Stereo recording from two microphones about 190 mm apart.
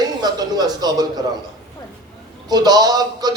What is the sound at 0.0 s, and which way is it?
Speech, 20° right (ahead or behind).